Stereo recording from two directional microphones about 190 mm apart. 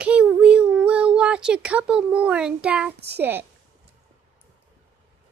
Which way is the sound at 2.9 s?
60° right (ahead or behind).